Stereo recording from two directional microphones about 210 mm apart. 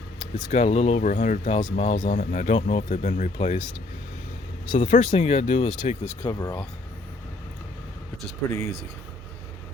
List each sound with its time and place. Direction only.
0.3 s speech: 30° left (ahead or behind)
4.7 s speech: 40° left (ahead or behind)
6.2 s speech: 15° left (ahead or behind)
8.4 s speech: 10° left (ahead or behind)